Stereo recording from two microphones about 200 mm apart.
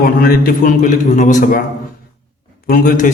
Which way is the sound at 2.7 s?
40° left (ahead or behind).